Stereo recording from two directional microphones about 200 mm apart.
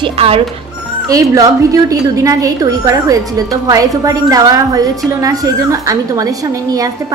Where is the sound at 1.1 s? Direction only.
15° right (ahead or behind).